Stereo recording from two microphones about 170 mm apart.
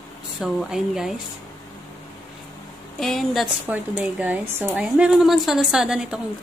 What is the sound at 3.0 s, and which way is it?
Speech, centre (ahead or behind).